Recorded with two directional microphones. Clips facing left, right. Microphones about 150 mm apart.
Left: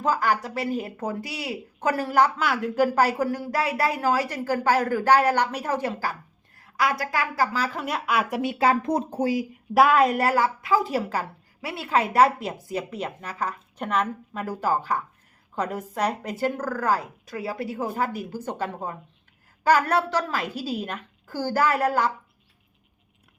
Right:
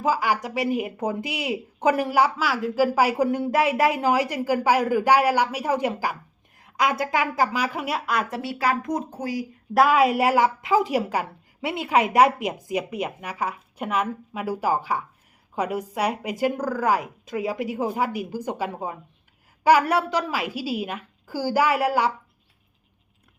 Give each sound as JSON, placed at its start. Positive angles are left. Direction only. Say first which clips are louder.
{"t": 0.0, "sound": "speech", "louder": "right 1 dB", "side_deg": -10}
{"t": 8.4, "sound": "speech", "louder": "left 3 dB", "side_deg": 20}
{"t": 9.7, "sound": "speech", "louder": "even", "side_deg": 0}